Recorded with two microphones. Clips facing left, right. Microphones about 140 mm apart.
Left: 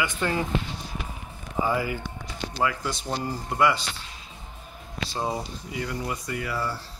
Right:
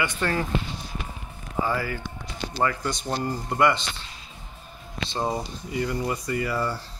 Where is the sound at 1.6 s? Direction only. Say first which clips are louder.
Left 1 dB; 15° left (ahead or behind).